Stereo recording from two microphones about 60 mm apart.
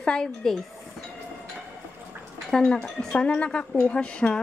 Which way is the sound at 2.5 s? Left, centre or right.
Centre.